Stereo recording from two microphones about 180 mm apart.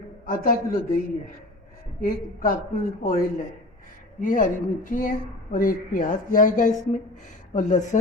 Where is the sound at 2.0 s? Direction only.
50° left (ahead or behind).